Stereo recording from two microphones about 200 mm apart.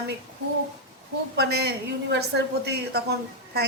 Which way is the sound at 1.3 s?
55° right (ahead or behind).